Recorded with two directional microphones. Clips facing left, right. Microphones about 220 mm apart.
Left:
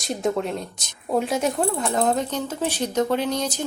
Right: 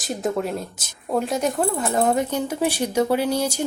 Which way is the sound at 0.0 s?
Centre (ahead or behind).